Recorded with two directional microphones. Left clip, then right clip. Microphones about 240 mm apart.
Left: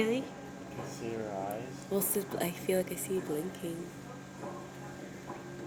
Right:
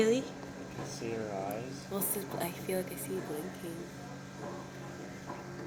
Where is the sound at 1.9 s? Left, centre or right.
Left.